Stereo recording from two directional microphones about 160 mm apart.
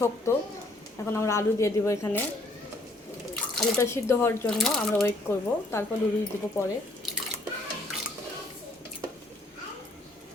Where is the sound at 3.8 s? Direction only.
15° left (ahead or behind).